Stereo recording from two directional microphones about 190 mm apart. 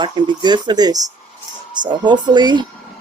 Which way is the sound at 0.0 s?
25° right (ahead or behind).